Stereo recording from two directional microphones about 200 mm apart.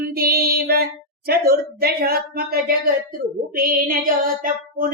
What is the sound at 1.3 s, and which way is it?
Speech, 50° right (ahead or behind).